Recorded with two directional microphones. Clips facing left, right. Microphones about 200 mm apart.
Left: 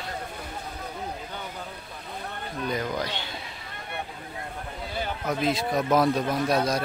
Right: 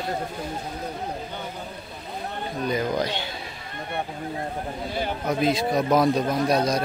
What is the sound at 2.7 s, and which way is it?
Speech, 20° right (ahead or behind).